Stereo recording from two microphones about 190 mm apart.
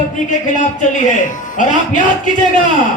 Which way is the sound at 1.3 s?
40° left (ahead or behind).